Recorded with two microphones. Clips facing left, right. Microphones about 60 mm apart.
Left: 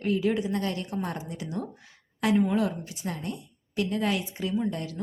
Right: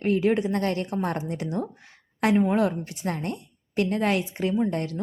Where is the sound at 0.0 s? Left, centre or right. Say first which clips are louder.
Right 4 dB; right.